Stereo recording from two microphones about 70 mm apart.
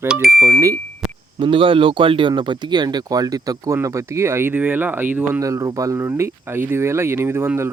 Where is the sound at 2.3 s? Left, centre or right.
Right.